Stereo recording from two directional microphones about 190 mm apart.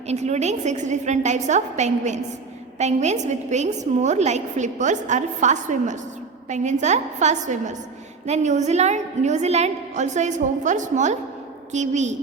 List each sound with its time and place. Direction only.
0.1 s a woman's voice: 35° right (ahead or behind)